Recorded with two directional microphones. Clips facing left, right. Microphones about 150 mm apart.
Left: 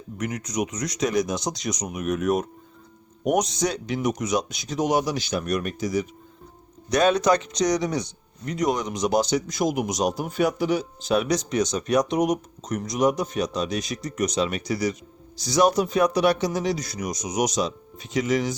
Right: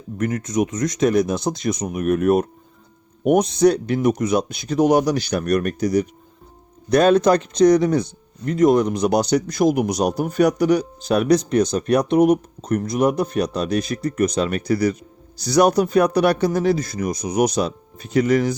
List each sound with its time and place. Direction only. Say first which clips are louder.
0.2 s speech: right 6 dB; 50° right (ahead or behind)
6.9 s speech: right 5 dB; 55° right (ahead or behind)